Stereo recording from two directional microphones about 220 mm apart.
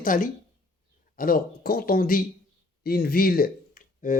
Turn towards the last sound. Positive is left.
turn(degrees=35)  # may be behind; listen again after turning